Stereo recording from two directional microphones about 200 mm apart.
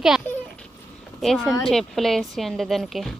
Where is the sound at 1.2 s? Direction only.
Centre (ahead or behind).